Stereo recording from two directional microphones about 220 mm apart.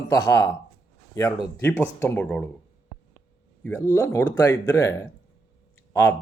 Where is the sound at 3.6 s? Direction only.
10° left (ahead or behind).